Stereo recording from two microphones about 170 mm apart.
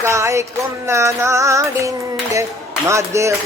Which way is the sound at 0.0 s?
15° right (ahead or behind).